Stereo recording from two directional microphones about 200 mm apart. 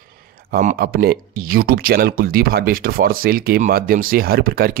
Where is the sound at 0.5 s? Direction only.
45° right (ahead or behind).